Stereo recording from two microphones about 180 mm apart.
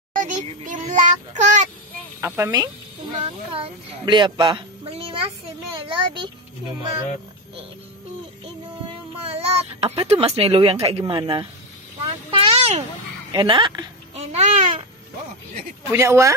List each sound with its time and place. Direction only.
0.1 s speech: 45° right (ahead or behind)
2.2 s speech: 15° right (ahead or behind)
3.1 s speech: 30° right (ahead or behind)
8.8 s speech: 35° right (ahead or behind)
12.0 s a sound: 30° right (ahead or behind)
13.3 s speech: 25° right (ahead or behind)
15.9 s speech: 15° right (ahead or behind)